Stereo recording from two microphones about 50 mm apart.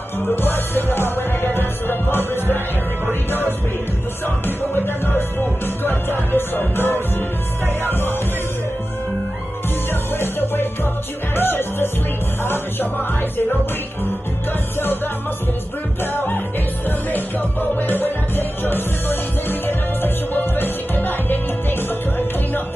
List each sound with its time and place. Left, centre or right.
0.4 s music: left
4.5 s music: left
10.1 s music: left
11.3 s speech: left
16.0 s music: left